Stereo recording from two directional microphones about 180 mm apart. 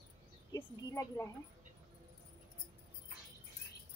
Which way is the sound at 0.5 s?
20° left (ahead or behind).